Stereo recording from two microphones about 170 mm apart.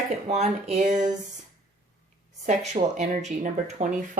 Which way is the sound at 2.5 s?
40° right (ahead or behind).